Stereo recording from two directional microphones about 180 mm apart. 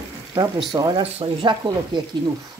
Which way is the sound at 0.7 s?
20° right (ahead or behind).